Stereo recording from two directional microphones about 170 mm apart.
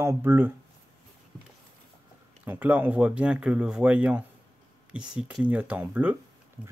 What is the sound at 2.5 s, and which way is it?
Speech, 10° right (ahead or behind).